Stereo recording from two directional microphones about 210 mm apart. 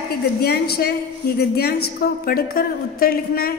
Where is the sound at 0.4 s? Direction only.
50° left (ahead or behind).